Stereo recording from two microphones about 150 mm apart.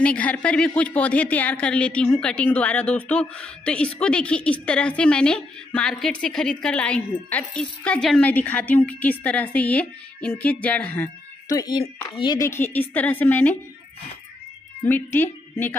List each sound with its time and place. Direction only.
0.0 s speech: 10° left (ahead or behind)
11.4 s speech: 25° left (ahead or behind)
12.4 s speech: 15° left (ahead or behind)
14.9 s speech: 15° left (ahead or behind)